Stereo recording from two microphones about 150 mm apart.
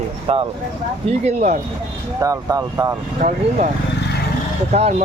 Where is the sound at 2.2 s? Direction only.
20° right (ahead or behind).